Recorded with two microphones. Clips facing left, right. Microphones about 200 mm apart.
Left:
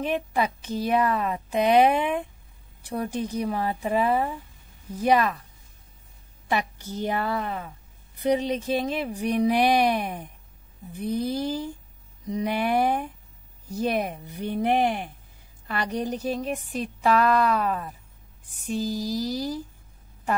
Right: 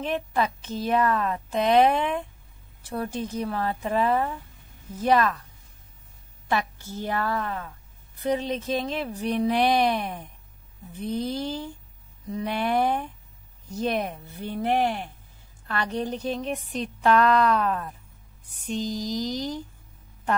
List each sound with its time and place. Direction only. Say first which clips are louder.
0.0 s a woman's voice: left 1 dB; 10° left (ahead or behind)
6.5 s a woman's voice: even; 15° left (ahead or behind)